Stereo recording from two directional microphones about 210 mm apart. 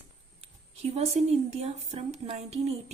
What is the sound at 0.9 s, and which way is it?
A woman's voice, 30° right (ahead or behind).